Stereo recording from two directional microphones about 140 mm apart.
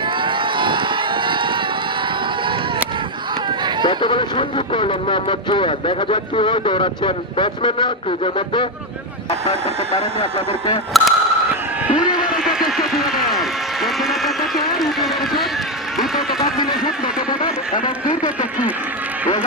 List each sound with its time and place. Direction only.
0.3 s run: 35° right (ahead or behind)
3.8 s speech: 35° left (ahead or behind)
10.9 s speech: centre (ahead or behind)
12.3 s a sound: 5° right (ahead or behind)